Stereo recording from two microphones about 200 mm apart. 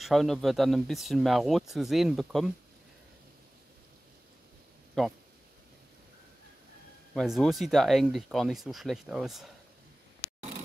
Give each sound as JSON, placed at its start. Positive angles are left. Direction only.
{"t": 0.0, "sound": "speech", "side_deg": 0}
{"t": 7.2, "sound": "speech", "side_deg": 0}